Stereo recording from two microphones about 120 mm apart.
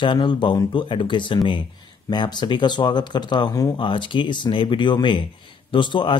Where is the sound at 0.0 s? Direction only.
40° left (ahead or behind).